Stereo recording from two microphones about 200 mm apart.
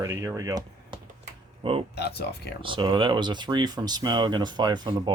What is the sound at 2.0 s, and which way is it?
Speech, 55° left (ahead or behind).